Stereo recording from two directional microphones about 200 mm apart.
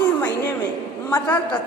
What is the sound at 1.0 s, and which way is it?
Speech, 10° left (ahead or behind).